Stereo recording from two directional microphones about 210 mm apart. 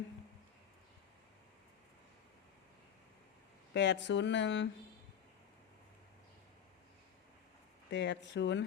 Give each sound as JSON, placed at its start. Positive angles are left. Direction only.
{"t": 3.8, "sound": "speech", "side_deg": 55}
{"t": 7.9, "sound": "speech", "side_deg": 55}